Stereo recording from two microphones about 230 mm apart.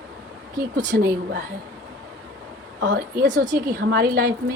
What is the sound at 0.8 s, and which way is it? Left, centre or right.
Speech, right.